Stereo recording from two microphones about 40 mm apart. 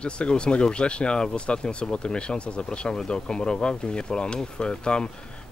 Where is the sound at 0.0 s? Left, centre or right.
Left.